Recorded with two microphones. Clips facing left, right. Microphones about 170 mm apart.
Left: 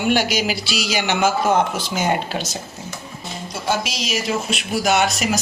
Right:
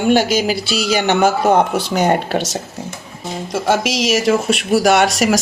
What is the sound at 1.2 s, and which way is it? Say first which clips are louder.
Speech: right 2 dB; 60° right (ahead or behind).